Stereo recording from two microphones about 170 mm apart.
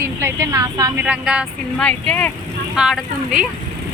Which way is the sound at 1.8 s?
5° left (ahead or behind).